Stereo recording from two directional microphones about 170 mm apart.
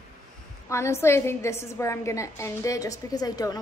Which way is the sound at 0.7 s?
15° left (ahead or behind).